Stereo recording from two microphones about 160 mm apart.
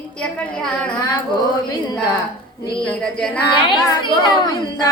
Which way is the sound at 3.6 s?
30° left (ahead or behind).